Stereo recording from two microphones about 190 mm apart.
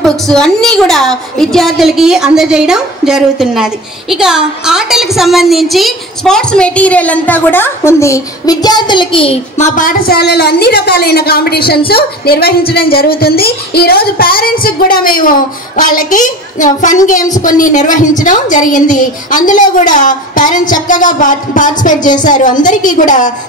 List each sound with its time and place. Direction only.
0.0 s a woman's voice: centre (ahead or behind); by 9.7 s 30° left (ahead or behind)
9.8 s a woman's voice: 50° left (ahead or behind)
11.9 s music: 55° left (ahead or behind)